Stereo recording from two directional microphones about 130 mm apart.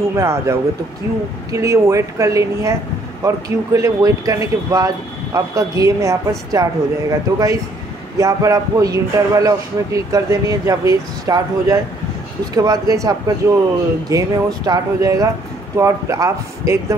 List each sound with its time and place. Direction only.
0.1 s speech: 20° right (ahead or behind)